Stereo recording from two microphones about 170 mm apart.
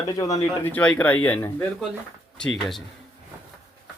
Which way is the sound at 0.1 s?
20° left (ahead or behind).